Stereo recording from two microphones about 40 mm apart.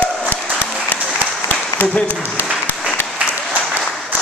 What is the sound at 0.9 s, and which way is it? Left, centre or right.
Applause, left.